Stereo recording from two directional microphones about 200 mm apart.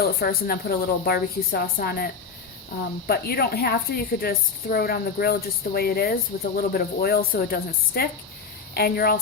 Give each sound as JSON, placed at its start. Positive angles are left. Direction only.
{"t": 0.0, "sound": "a woman's voice", "side_deg": 50}
{"t": 3.1, "sound": "a woman's voice", "side_deg": 50}